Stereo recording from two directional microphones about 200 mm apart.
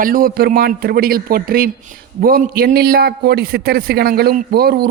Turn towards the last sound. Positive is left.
turn(degrees=-50)  # may be behind; listen again after turning